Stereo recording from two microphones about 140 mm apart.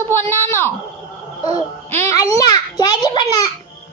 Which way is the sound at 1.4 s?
50° right (ahead or behind).